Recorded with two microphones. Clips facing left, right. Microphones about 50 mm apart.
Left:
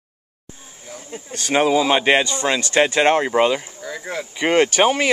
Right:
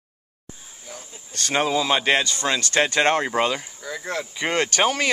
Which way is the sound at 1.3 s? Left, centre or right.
Centre.